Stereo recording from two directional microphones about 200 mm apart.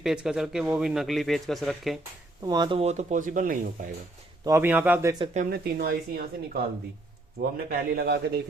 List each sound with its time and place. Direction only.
0.0 s a man's voice: 5° right (ahead or behind)
2.4 s speech: 20° right (ahead or behind); by 3.7 s 45° right (ahead or behind)
4.4 s a man's voice: 10° right (ahead or behind)
5.2 s speech: 35° right (ahead or behind)
5.5 s speech: 50° right (ahead or behind)
7.7 s speech: 50° right (ahead or behind)